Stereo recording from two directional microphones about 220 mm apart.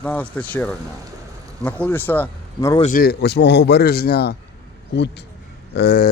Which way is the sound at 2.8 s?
40° left (ahead or behind).